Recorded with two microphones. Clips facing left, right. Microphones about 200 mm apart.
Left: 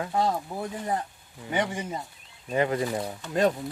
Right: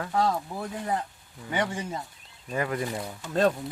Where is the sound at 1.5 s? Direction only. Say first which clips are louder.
Left 1 dB; 20° left (ahead or behind).